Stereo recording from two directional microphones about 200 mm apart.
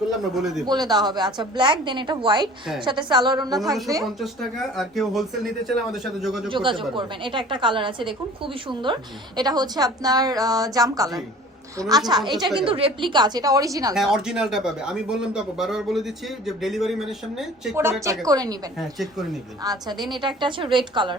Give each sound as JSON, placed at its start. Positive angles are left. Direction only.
{"t": 0.3, "sound": "speech", "side_deg": 0}
{"t": 0.6, "sound": "a woman's voice", "side_deg": -20}
{"t": 4.0, "sound": "speech", "side_deg": 0}
{"t": 6.5, "sound": "a woman's voice", "side_deg": -25}
{"t": 13.9, "sound": "speech", "side_deg": 0}
{"t": 18.3, "sound": "a woman's voice", "side_deg": -20}
{"t": 18.8, "sound": "speech", "side_deg": 0}
{"t": 19.6, "sound": "a woman's voice", "side_deg": -20}